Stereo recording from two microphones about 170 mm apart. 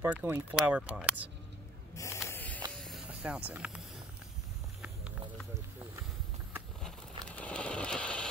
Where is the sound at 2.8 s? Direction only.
5° right (ahead or behind).